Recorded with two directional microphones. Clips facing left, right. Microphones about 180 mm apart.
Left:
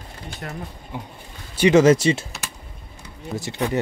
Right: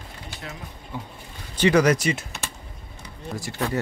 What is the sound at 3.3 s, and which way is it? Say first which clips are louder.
Speech: left 3 dB; 20° left (ahead or behind).